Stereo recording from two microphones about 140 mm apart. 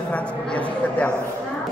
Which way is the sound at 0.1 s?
10° left (ahead or behind).